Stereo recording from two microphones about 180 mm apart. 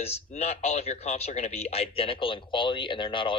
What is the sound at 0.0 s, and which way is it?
Speech, 35° left (ahead or behind).